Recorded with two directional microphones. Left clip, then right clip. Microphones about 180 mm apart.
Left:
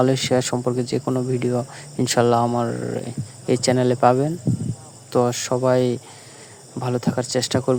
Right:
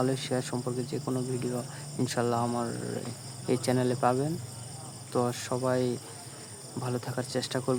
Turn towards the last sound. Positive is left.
turn(degrees=35)  # may be behind; listen again after turning